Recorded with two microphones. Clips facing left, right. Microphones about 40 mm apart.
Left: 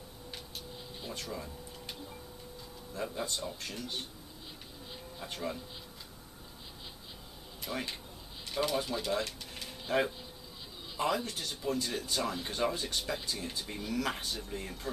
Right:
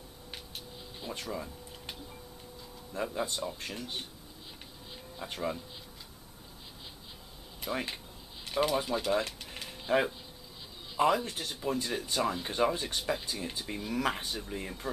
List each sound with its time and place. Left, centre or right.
0.6 s a sound: centre
3.0 s speech: centre
4.9 s insect: centre
7.6 s speech: centre